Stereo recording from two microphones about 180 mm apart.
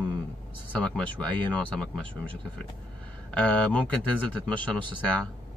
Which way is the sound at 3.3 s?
5° left (ahead or behind).